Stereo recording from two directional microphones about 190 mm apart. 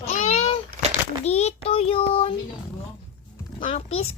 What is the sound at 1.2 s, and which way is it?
Child singing, 35° left (ahead or behind).